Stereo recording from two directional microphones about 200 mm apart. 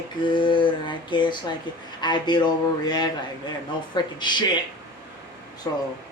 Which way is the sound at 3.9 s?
20° left (ahead or behind).